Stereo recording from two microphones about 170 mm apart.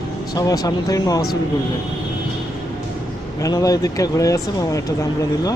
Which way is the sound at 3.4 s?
20° left (ahead or behind).